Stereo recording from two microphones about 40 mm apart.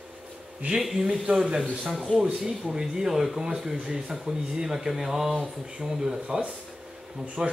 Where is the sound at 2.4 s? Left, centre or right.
Centre.